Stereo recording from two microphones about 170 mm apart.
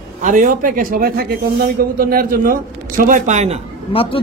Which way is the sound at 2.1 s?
60° right (ahead or behind).